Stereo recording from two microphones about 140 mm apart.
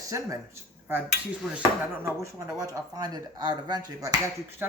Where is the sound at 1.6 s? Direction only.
20° right (ahead or behind).